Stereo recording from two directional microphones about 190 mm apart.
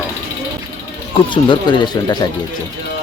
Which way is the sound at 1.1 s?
25° left (ahead or behind).